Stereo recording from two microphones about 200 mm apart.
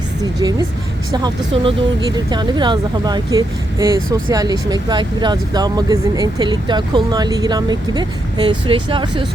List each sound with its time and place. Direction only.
0.2 s speech: 20° right (ahead or behind)